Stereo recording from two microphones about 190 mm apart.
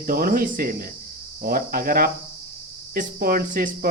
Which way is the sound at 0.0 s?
50° right (ahead or behind).